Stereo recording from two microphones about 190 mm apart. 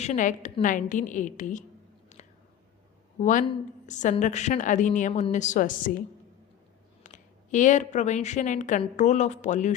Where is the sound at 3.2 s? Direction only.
40° left (ahead or behind).